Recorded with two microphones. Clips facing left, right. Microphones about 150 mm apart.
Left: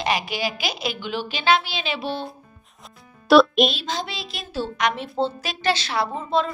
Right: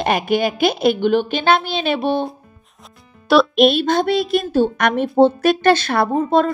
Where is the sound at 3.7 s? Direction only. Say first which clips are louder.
Right 13 dB; 55° right (ahead or behind).